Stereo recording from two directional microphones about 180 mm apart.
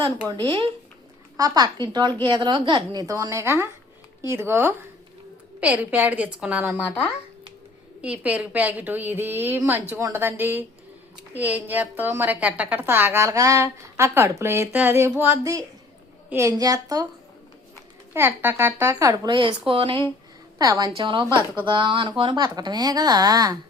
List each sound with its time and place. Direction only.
0.0 s a woman's voice: 25° right (ahead or behind); by 6.8 s 5° right (ahead or behind)
8.0 s a woman's voice: 5° right (ahead or behind)
18.1 s speech: 10° right (ahead or behind)